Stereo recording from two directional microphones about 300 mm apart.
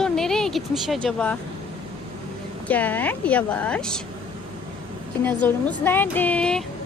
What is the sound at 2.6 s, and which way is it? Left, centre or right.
Speech, centre.